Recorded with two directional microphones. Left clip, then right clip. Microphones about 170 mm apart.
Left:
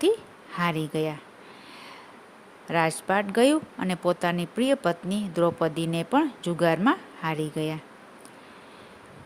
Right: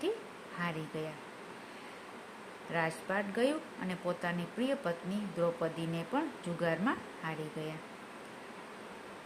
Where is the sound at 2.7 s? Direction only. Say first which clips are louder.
Left 10 dB; 70° left (ahead or behind).